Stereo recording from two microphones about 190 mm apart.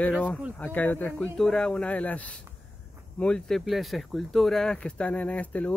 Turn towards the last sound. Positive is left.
turn(degrees=5)  # may be behind; listen again after turning